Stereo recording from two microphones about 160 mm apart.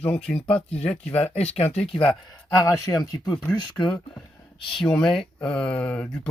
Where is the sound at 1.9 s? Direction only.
30° left (ahead or behind).